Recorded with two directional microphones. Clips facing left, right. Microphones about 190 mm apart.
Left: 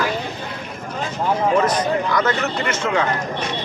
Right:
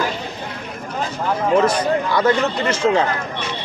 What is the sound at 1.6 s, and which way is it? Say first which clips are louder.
A man's voice: right 1 dB; 30° right (ahead or behind).